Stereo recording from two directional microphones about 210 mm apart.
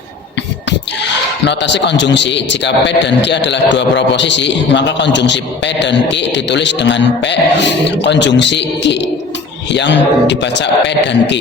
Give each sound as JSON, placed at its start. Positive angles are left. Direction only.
{"t": 1.5, "sound": "a man's voice", "side_deg": 55}